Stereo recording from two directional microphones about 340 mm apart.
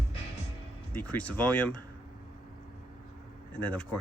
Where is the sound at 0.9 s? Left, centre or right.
Centre.